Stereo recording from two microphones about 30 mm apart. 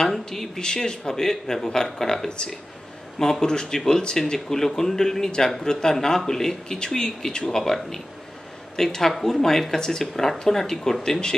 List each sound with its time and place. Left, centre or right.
0.0 s speech: centre
8.7 s speech: centre